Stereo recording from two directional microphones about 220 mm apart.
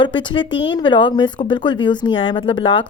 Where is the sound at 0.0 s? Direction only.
20° left (ahead or behind).